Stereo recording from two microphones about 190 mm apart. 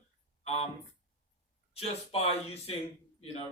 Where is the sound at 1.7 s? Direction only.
30° left (ahead or behind).